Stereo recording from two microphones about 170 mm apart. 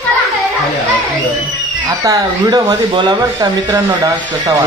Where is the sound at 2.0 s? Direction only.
20° right (ahead or behind).